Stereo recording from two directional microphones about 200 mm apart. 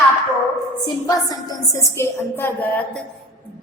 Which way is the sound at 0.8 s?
20° left (ahead or behind).